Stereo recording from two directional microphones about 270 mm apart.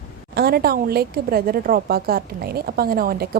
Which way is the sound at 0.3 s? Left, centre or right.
Right.